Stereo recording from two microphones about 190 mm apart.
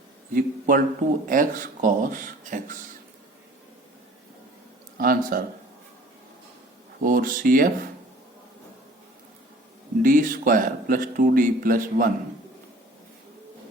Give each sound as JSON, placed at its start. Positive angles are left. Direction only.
{"t": 0.3, "sound": "speech", "side_deg": -45}
{"t": 4.9, "sound": "speech", "side_deg": -50}
{"t": 7.0, "sound": "speech", "side_deg": -45}
{"t": 10.0, "sound": "speech", "side_deg": -45}